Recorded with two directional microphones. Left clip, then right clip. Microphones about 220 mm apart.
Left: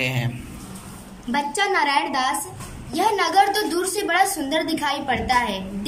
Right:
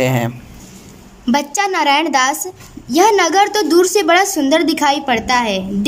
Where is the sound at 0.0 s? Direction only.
30° right (ahead or behind).